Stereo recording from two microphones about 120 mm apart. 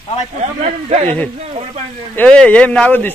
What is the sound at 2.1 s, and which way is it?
Speech, 10° left (ahead or behind).